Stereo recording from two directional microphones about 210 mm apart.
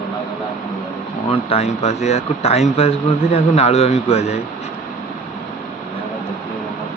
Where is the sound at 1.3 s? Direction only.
25° left (ahead or behind).